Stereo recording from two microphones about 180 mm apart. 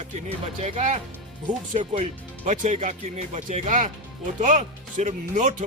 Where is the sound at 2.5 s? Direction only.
40° right (ahead or behind).